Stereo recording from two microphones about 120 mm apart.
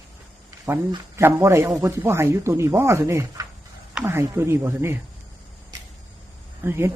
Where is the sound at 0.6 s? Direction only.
25° right (ahead or behind).